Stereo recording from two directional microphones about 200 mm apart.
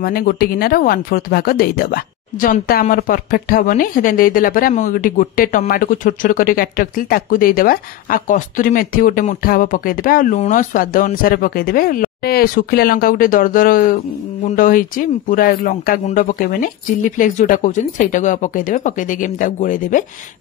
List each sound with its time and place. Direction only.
0.0 s a woman's voice: 45° left (ahead or behind)